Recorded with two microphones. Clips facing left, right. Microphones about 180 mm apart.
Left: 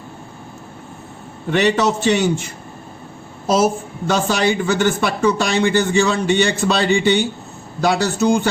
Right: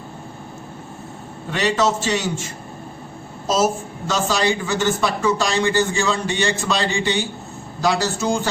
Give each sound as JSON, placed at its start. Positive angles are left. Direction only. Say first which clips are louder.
{"t": 1.5, "sound": "a woman's voice", "louder": "left 3 dB", "side_deg": 60}
{"t": 7.8, "sound": "a woman's voice", "louder": "left 3 dB", "side_deg": 60}